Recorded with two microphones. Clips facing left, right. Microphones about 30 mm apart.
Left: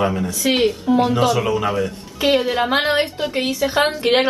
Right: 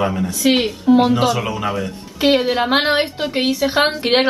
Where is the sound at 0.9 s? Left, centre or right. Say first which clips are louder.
Right 6 dB; centre.